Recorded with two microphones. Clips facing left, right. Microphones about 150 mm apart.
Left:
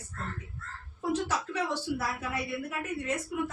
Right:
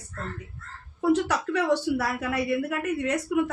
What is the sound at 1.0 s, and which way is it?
Speech, 75° right (ahead or behind).